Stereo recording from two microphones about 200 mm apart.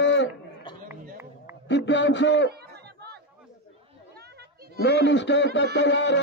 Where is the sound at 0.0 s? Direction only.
65° left (ahead or behind).